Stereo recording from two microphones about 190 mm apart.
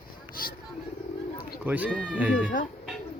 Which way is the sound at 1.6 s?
10° right (ahead or behind).